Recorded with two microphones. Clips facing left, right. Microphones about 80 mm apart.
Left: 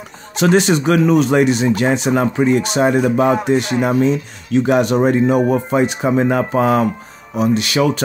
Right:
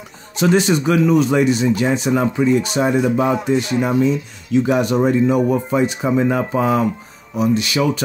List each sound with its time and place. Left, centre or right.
0.3 s speech: left
2.1 s speech: left